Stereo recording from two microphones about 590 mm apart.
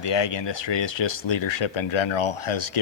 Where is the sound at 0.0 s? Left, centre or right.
Left.